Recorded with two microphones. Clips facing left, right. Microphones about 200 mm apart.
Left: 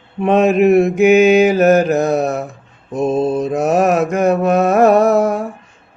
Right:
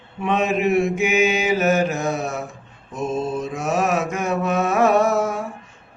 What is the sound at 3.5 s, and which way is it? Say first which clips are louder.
Mantra: left 7 dB; 60° left (ahead or behind).